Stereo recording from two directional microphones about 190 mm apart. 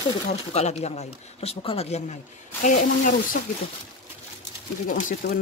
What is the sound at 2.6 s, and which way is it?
Speech, 45° left (ahead or behind).